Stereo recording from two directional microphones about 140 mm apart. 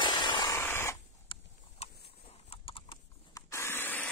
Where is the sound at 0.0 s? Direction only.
35° left (ahead or behind).